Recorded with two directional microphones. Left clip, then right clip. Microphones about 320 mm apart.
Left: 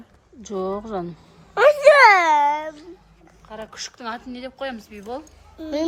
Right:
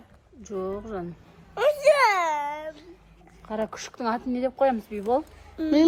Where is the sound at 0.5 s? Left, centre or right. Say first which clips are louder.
Left 5 dB; left.